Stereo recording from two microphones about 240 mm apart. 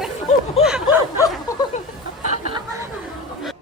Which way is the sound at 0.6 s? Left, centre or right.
Centre.